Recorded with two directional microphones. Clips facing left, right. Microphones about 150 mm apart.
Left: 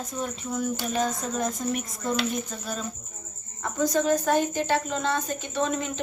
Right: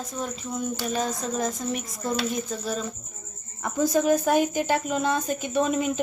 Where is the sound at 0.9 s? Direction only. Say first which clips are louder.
Even; centre (ahead or behind).